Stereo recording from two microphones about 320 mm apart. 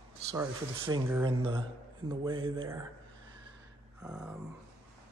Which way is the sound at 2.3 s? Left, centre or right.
Right.